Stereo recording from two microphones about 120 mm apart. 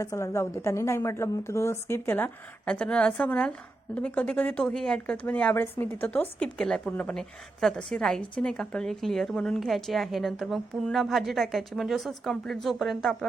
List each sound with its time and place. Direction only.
0.0 s a woman's voice: 25° left (ahead or behind); by 13.1 s 5° left (ahead or behind)